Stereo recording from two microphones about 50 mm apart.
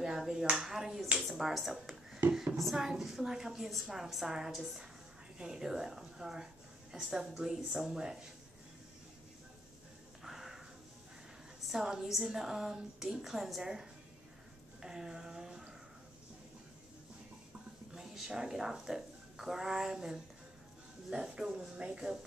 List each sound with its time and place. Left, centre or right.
0.0 s finger snapping: centre
0.7 s a woman's voice: centre
10.2 s a sound: centre
11.7 s a woman's voice: centre
14.8 s a sound: centre
17.9 s a woman's voice: centre